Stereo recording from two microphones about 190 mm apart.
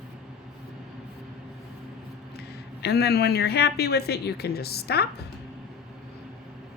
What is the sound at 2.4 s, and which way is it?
A woman's voice, 60° left (ahead or behind).